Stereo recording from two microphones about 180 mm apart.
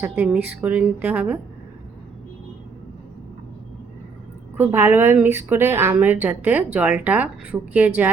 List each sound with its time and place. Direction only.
0.0 s a woman's voice: 10° right (ahead or behind)
4.5 s a woman's voice: 15° right (ahead or behind)